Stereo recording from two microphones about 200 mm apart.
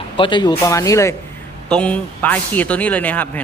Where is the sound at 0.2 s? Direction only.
25° left (ahead or behind).